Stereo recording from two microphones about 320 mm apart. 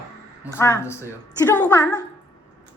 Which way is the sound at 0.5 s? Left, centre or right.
Centre.